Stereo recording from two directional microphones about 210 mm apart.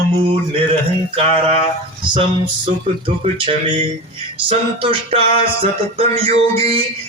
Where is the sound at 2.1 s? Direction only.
25° right (ahead or behind).